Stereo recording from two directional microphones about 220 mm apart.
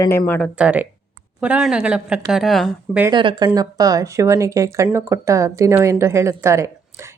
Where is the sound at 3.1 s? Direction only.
20° right (ahead or behind).